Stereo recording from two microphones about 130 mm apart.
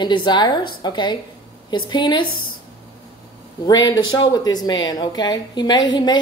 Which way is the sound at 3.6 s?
35° left (ahead or behind).